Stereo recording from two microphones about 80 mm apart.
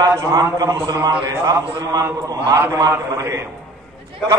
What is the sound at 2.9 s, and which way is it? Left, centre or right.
Speech, right.